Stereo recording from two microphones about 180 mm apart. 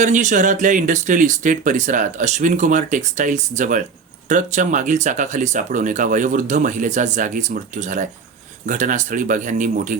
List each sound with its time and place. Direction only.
0.0 s speech: 45° right (ahead or behind)